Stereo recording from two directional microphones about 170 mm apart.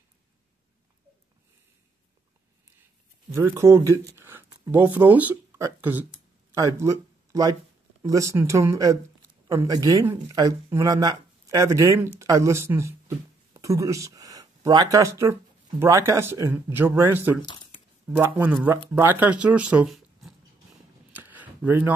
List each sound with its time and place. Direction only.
3.3 s speech: 15° right (ahead or behind)
17.4 s squish: 30° left (ahead or behind)
18.1 s speech: 10° right (ahead or behind)
21.1 s a sound: 10° right (ahead or behind)